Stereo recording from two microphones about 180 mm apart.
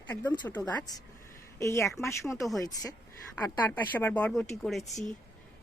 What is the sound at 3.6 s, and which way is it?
Speech, 10° left (ahead or behind).